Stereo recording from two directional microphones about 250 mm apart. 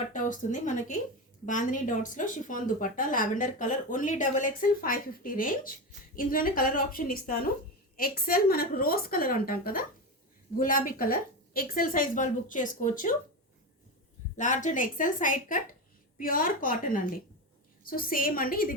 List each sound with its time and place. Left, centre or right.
0.1 s a woman's voice: left
14.3 s a woman's voice: left